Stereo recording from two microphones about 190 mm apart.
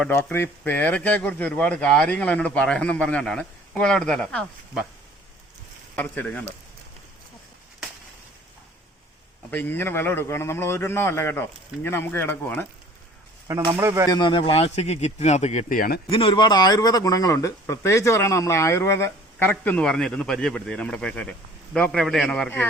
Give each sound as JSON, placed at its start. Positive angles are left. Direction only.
{"t": 0.0, "sound": "speech", "side_deg": 10}
{"t": 6.0, "sound": "speech", "side_deg": 10}
{"t": 9.5, "sound": "speech", "side_deg": 10}
{"t": 13.5, "sound": "speech", "side_deg": -10}
{"t": 14.1, "sound": "speech", "side_deg": 25}
{"t": 16.0, "sound": "speech", "side_deg": 30}